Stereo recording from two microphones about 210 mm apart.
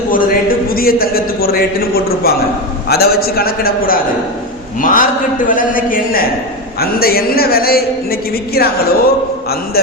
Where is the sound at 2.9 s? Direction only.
45° left (ahead or behind).